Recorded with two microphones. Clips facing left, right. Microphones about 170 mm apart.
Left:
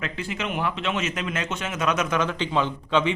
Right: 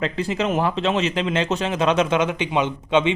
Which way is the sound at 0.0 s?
35° right (ahead or behind).